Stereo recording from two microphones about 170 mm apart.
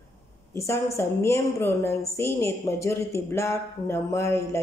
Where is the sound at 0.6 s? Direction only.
15° left (ahead or behind).